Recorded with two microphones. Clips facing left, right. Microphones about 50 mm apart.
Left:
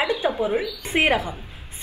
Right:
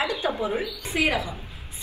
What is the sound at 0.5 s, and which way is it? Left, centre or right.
Speech, left.